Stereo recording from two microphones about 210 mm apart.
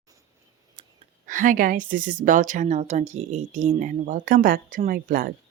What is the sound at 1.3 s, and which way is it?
Speech, 40° right (ahead or behind).